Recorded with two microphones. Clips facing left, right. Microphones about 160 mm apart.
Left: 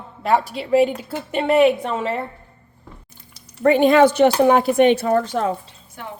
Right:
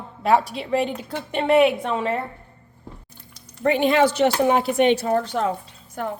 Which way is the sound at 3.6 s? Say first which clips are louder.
Left 5 dB; 45° left (ahead or behind).